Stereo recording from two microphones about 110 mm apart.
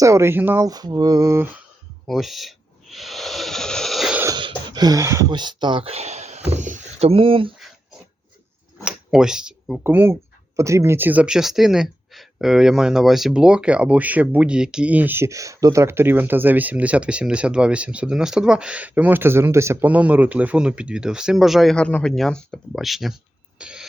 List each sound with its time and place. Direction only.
0.0 s speech: 25° right (ahead or behind)
0.6 s mantra: 35° right (ahead or behind)
2.0 s snake: centre (ahead or behind)
4.4 s a sound: 45° right (ahead or behind)
5.3 s speech: 45° right (ahead or behind)
5.9 s speech: 85° right; by 7.5 s 55° right (ahead or behind)
8.8 s a sound: 5° right (ahead or behind)
9.8 s speech: 20° right (ahead or behind); by 23.1 s centre (ahead or behind)
23.6 s a sound: 10° right (ahead or behind)